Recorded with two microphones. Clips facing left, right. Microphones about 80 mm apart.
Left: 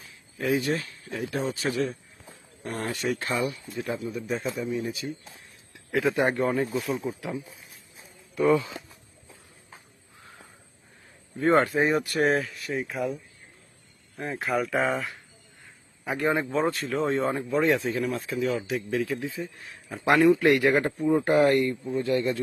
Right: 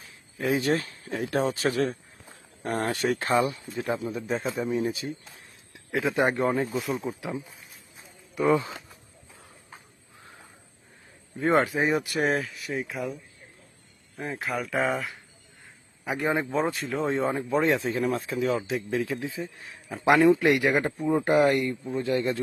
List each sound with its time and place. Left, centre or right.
0.3 s speech: right
0.6 s a man's voice: right
3.4 s a man's voice: right
4.6 s a man's voice: right
5.7 s speech: right
6.7 s speech: centre
11.3 s speech: centre
14.2 s speech: centre; by 22.4 s right